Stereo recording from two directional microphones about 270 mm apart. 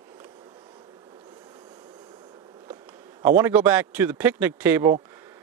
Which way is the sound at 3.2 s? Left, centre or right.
Centre.